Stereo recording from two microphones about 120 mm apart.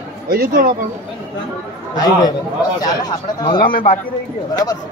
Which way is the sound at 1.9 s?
35° left (ahead or behind).